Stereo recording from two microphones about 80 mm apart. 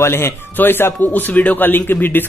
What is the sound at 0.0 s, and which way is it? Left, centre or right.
A man's voice, left.